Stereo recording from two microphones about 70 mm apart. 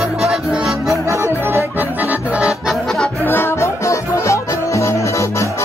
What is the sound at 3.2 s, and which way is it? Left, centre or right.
Music, left.